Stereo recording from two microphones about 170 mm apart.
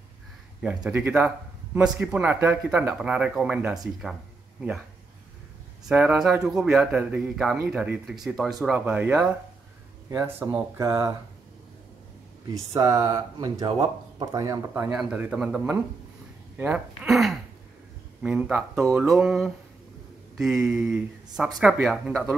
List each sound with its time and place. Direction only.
0.8 s speech: 5° right (ahead or behind)
5.9 s a man's voice: 5° right (ahead or behind)
12.7 s speech: 20° right (ahead or behind)
16.5 s a sound: 5° right (ahead or behind)
18.2 s a man's voice: 5° right (ahead or behind)